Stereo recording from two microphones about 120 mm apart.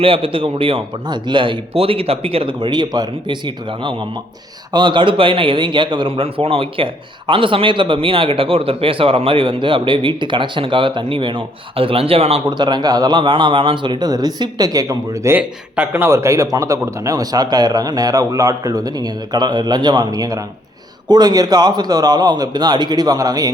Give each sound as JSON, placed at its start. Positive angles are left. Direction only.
{"t": 0.0, "sound": "a man's voice", "side_deg": -50}
{"t": 12.5, "sound": "a man's voice", "side_deg": -40}
{"t": 15.4, "sound": "a man's voice", "side_deg": -10}